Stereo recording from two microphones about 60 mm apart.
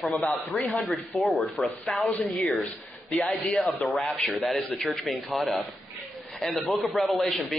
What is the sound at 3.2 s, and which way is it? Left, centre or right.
Speech, left.